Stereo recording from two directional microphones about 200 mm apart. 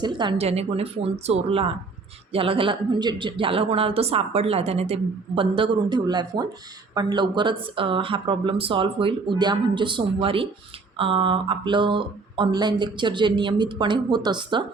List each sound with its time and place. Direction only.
0.0 s speech: 25° right (ahead or behind)